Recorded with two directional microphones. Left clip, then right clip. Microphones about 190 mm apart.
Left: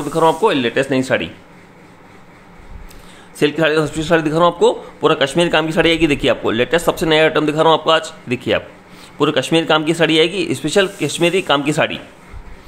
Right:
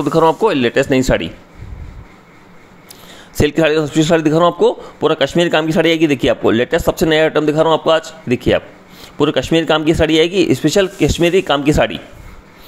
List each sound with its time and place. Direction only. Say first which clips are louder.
0.0 s speech: right 2 dB; 35° right (ahead or behind)
3.3 s a man's voice: right 1 dB; 30° right (ahead or behind)